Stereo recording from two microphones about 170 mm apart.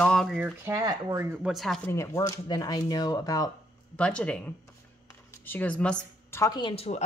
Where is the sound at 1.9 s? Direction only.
15° left (ahead or behind).